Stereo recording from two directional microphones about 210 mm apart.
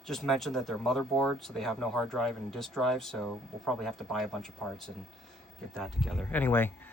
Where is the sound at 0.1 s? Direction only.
Centre (ahead or behind).